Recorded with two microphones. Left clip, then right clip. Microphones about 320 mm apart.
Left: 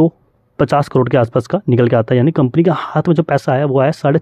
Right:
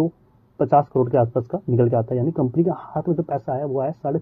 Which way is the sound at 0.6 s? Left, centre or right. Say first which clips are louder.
Left 4 dB; left.